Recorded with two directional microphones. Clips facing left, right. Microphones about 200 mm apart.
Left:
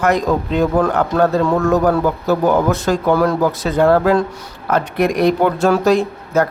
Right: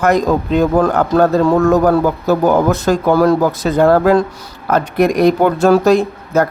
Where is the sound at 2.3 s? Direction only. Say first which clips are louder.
Right 2 dB; 45° right (ahead or behind).